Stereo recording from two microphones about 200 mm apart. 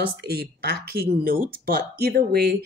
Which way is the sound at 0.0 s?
50° right (ahead or behind).